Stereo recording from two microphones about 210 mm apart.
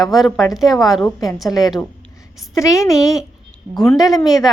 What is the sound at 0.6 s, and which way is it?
A woman's voice, 15° left (ahead or behind).